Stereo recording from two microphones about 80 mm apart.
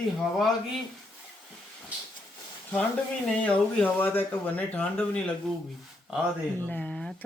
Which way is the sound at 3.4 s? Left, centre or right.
Centre.